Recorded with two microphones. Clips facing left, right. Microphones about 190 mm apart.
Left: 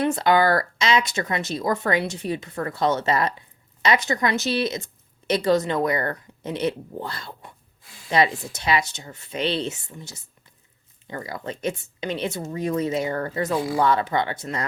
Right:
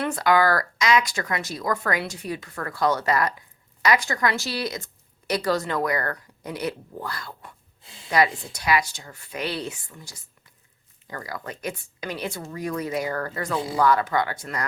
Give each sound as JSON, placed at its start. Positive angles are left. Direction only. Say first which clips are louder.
{"t": 0.0, "sound": "speech", "louder": "left 2 dB", "side_deg": 25}
{"t": 7.8, "sound": "a sound", "louder": "right 1 dB", "side_deg": -25}
{"t": 8.1, "sound": "speech", "louder": "left 1 dB", "side_deg": 25}